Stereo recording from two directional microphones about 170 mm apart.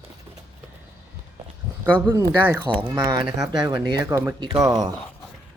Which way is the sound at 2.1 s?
15° right (ahead or behind).